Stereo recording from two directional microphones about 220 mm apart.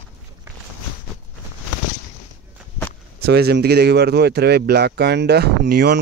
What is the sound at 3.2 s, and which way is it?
Speech, 45° right (ahead or behind).